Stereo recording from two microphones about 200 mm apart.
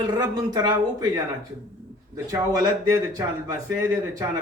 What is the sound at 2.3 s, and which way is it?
A man's voice, 15° right (ahead or behind).